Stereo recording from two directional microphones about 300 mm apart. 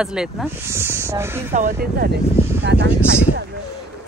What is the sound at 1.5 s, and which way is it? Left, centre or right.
Speech, right.